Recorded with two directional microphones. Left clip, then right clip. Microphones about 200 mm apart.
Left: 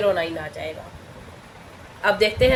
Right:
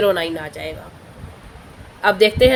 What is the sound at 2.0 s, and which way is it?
Speech, 35° right (ahead or behind).